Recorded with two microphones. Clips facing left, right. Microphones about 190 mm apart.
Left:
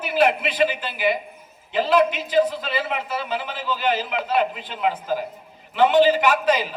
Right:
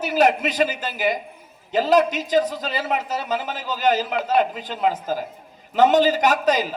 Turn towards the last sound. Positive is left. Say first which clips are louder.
# even
turn(degrees=-40)  # may be behind; listen again after turning